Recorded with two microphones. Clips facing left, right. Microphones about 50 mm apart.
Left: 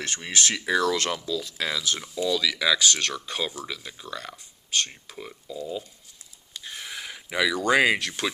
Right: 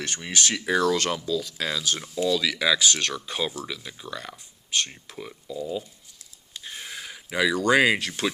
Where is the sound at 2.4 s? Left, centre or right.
Right.